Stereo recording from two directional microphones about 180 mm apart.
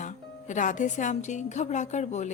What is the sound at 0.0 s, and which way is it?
A woman's voice, 45° left (ahead or behind).